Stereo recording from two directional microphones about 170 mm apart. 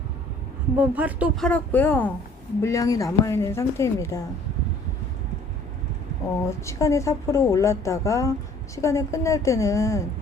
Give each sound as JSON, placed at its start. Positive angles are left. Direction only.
{"t": 0.8, "sound": "speech", "side_deg": -10}
{"t": 1.4, "sound": "speech", "side_deg": 5}
{"t": 6.4, "sound": "speech", "side_deg": 15}